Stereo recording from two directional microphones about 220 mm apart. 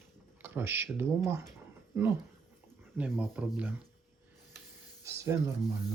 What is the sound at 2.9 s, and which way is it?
Speech, 5° right (ahead or behind).